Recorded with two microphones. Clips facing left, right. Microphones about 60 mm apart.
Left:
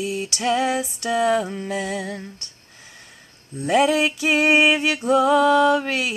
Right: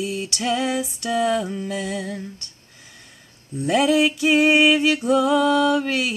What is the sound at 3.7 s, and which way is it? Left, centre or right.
Music, centre.